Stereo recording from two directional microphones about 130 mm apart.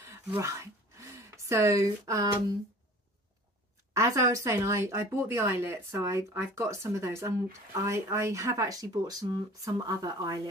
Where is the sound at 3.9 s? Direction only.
25° right (ahead or behind).